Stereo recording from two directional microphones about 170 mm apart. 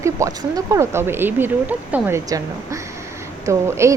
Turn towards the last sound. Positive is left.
turn(degrees=-15)  # may be behind; listen again after turning